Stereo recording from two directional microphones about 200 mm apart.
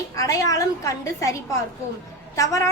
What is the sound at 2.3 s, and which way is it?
Speech, 15° left (ahead or behind).